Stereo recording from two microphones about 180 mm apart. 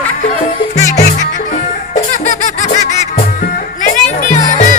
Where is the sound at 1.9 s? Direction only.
45° left (ahead or behind).